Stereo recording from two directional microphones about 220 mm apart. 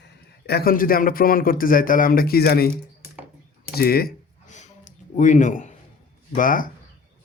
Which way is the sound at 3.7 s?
45° left (ahead or behind).